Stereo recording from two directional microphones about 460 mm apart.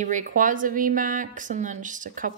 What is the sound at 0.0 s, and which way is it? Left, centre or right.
Speech, centre.